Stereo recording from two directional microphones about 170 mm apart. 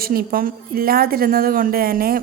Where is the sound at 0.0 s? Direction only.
60° right (ahead or behind).